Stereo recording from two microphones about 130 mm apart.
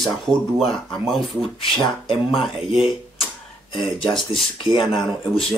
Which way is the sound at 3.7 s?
40° left (ahead or behind).